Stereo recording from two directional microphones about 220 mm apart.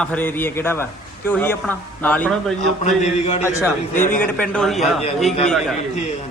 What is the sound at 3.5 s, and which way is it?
A man's voice, 15° left (ahead or behind).